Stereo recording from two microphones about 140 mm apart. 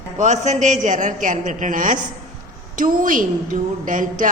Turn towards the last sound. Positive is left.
turn(degrees=-70)  # may be behind; listen again after turning